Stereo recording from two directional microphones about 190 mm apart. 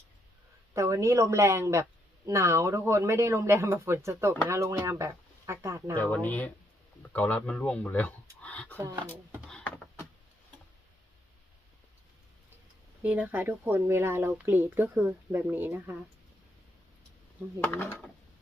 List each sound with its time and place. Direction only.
0.7 s a woman's voice: 15° right (ahead or behind)
6.0 s speech: 10° left (ahead or behind)
9.5 s a sound: 5° left (ahead or behind)
13.0 s a woman's voice: 10° right (ahead or behind)
17.6 s speech: 10° left (ahead or behind)